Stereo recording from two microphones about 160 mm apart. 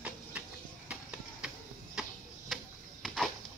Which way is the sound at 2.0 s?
Centre (ahead or behind).